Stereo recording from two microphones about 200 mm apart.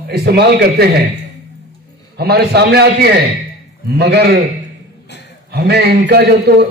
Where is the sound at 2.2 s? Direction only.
55° right (ahead or behind).